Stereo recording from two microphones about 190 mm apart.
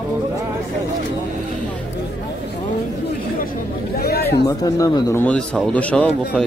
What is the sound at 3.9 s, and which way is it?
Speech, 55° left (ahead or behind).